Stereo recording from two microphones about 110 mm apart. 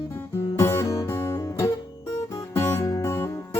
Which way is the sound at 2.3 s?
30° left (ahead or behind).